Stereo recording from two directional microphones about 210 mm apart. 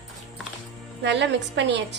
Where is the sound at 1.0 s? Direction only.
55° right (ahead or behind).